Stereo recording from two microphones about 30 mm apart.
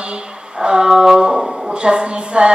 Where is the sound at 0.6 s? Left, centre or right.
Right.